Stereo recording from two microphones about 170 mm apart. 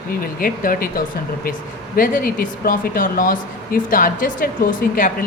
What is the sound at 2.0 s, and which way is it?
A woman's voice, 55° left (ahead or behind).